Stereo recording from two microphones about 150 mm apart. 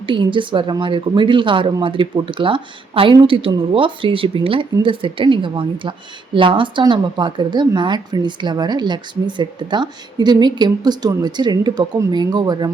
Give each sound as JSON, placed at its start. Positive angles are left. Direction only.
{"t": 0.0, "sound": "speech", "side_deg": -35}